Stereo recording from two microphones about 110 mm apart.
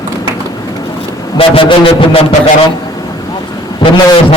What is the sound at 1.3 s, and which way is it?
Speech, 50° left (ahead or behind).